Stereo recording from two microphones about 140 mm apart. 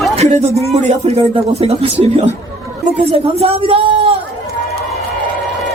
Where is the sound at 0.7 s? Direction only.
50° right (ahead or behind).